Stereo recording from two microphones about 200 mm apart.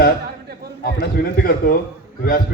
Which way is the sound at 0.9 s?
50° left (ahead or behind).